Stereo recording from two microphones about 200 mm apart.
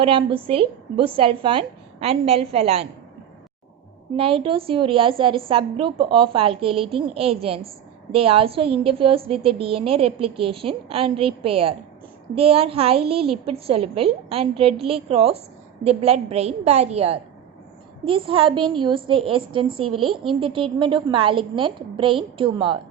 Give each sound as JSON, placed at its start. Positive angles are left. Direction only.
{"t": 0.0, "sound": "a woman's voice", "side_deg": -25}
{"t": 4.2, "sound": "a woman's voice", "side_deg": -25}